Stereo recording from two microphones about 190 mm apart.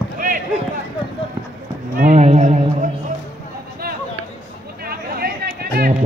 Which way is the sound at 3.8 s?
55° right (ahead or behind).